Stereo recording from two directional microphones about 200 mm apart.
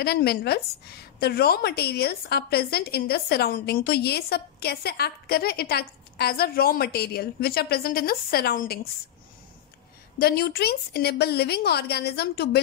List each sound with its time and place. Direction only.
0.0 s a woman's voice: 55° left (ahead or behind)
10.1 s a woman's voice: 50° left (ahead or behind)